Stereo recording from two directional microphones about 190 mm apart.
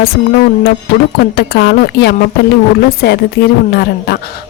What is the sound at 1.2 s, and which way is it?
A woman's voice, 55° left (ahead or behind).